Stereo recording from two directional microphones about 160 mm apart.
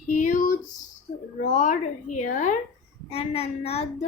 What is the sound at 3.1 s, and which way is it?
Speech, 40° left (ahead or behind).